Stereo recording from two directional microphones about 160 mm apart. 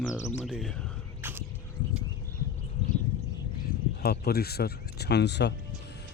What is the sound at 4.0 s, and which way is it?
Speech, 80° left.